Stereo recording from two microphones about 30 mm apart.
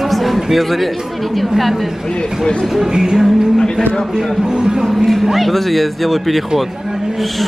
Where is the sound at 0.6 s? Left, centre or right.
Centre.